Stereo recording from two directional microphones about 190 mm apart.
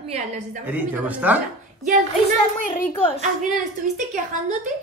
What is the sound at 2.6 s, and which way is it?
Speech, 45° left (ahead or behind).